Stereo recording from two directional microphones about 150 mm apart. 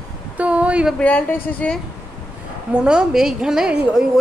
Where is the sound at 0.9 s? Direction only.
10° left (ahead or behind).